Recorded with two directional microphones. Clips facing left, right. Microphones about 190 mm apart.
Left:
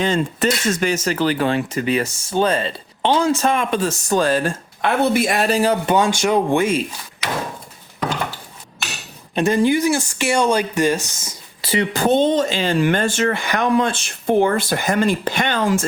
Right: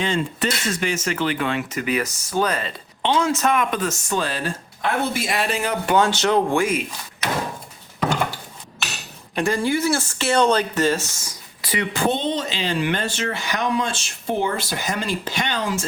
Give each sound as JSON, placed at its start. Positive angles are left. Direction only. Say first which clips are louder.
{"t": 0.0, "sound": "speech", "louder": "left 4 dB", "side_deg": 45}
{"t": 5.8, "sound": "speech", "louder": "left 1 dB", "side_deg": 15}
{"t": 6.6, "sound": "speech", "louder": "left 3 dB", "side_deg": 25}
{"t": 9.3, "sound": "speech", "louder": "left 5 dB", "side_deg": 20}
{"t": 11.9, "sound": "speech", "louder": "left 7 dB", "side_deg": 45}